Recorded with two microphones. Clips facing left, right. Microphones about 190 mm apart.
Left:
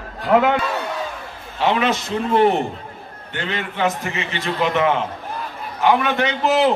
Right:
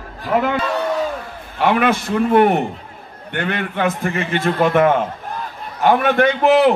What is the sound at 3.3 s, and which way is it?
A man's voice, 55° right (ahead or behind).